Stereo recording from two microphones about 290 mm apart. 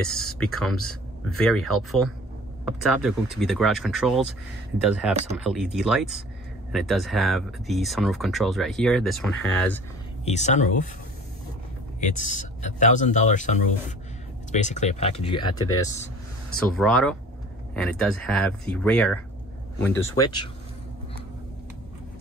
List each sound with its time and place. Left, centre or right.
0.2 s speech: centre
10.2 s speech: left
12.0 s speech: left
16.5 s speech: centre